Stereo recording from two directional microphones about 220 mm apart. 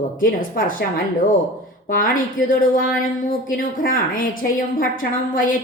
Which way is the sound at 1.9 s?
40° left (ahead or behind).